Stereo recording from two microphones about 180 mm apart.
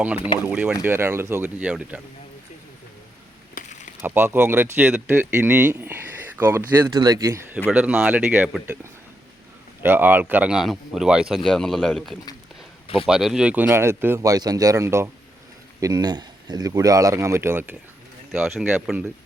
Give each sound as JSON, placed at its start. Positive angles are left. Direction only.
{"t": 0.4, "sound": "speech", "side_deg": -5}
{"t": 3.5, "sound": "a sound", "side_deg": 45}
{"t": 4.0, "sound": "speech", "side_deg": -10}
{"t": 7.7, "sound": "a man's voice", "side_deg": -5}